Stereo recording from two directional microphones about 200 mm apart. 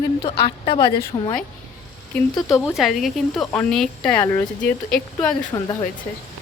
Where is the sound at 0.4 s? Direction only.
30° left (ahead or behind).